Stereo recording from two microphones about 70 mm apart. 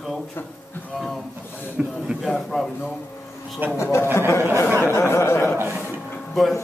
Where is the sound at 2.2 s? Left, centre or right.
Centre.